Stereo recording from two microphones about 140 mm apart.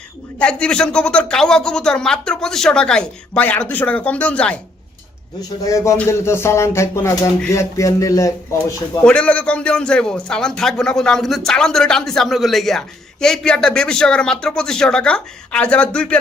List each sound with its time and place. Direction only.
0.3 s speech: 5° left (ahead or behind)
5.6 s speech: 20° left (ahead or behind)
9.0 s a man's voice: 10° left (ahead or behind)